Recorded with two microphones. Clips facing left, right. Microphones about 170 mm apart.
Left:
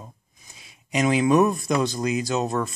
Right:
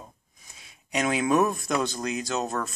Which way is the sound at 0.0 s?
Centre (ahead or behind).